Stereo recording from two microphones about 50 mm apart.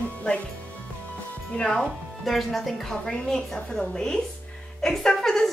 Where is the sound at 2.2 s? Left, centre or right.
Centre.